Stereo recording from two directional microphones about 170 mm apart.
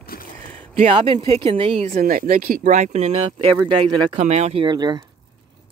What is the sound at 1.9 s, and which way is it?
Speech, 50° right (ahead or behind).